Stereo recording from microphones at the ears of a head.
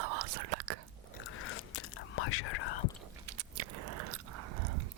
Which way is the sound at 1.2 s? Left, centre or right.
Left.